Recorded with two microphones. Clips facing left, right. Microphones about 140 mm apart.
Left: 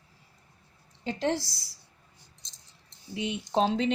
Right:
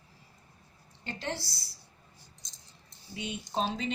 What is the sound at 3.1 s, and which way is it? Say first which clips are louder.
Speech: left 6 dB; 90° left.